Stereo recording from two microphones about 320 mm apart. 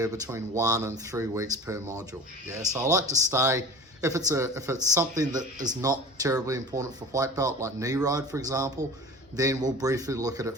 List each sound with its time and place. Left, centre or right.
0.0 s speech: centre
5.4 s speech: right
5.8 s speech: centre